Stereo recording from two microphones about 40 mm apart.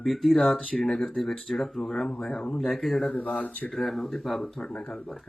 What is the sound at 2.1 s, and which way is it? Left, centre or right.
Speech, centre.